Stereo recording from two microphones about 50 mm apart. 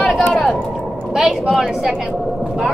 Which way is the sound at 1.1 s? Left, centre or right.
Centre.